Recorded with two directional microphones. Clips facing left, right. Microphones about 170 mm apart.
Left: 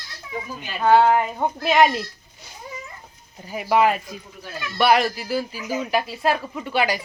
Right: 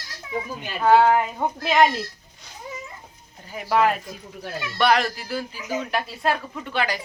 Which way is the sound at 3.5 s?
10° left (ahead or behind).